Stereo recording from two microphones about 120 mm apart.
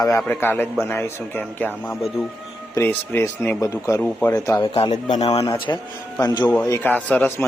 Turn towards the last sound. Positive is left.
turn(degrees=15)  # may be behind; listen again after turning